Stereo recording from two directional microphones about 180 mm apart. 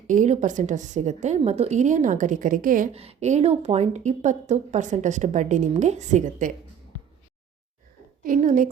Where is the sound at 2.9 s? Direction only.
35° right (ahead or behind).